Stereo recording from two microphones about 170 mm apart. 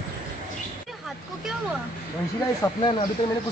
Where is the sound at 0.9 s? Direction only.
Centre (ahead or behind).